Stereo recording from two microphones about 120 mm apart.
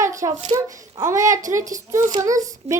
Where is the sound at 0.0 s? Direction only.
25° right (ahead or behind).